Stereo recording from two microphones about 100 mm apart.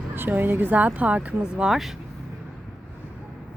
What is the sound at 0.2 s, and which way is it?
Speech, 20° right (ahead or behind).